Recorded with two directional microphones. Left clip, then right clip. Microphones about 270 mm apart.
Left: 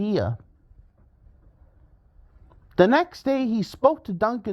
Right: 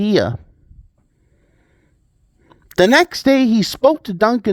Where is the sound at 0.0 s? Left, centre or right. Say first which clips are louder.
Right 9 dB; right.